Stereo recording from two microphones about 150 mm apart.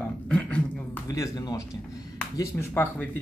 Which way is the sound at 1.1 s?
25° left (ahead or behind).